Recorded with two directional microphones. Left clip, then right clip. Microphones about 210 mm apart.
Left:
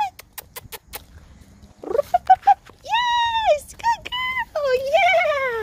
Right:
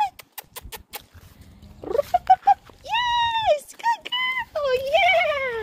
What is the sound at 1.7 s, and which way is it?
Cat, 5° left (ahead or behind).